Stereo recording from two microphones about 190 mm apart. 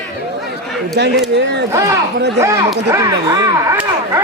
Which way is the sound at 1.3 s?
65° right (ahead or behind).